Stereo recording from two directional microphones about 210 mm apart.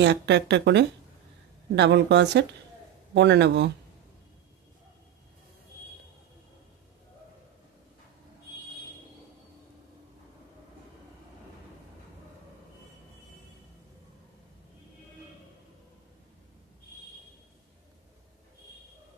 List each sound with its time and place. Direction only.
0.0 s speech: 55° right (ahead or behind)